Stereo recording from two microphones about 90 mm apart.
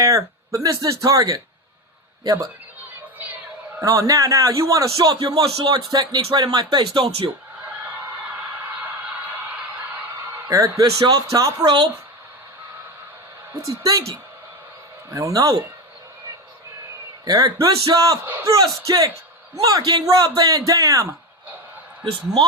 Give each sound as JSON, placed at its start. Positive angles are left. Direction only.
{"t": 0.0, "sound": "a man's voice", "side_deg": -35}
{"t": 3.8, "sound": "a man's voice", "side_deg": -40}
{"t": 10.5, "sound": "a man's voice", "side_deg": -35}
{"t": 11.6, "sound": "speech", "side_deg": -55}
{"t": 13.5, "sound": "a man's voice", "side_deg": -35}
{"t": 15.1, "sound": "a man's voice", "side_deg": -35}
{"t": 17.2, "sound": "a man's voice", "side_deg": -45}